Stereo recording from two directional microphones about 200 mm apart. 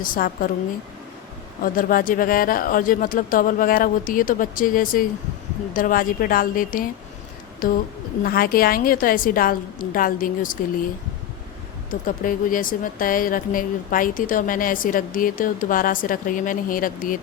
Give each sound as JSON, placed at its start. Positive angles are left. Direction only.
{"t": 0.0, "sound": "a woman's voice", "side_deg": 45}
{"t": 1.6, "sound": "a woman's voice", "side_deg": 45}
{"t": 11.9, "sound": "a woman's voice", "side_deg": 45}